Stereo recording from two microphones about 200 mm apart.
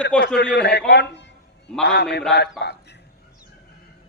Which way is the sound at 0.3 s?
60° left (ahead or behind).